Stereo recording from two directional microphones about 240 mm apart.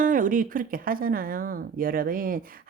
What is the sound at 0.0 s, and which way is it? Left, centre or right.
Speech, right.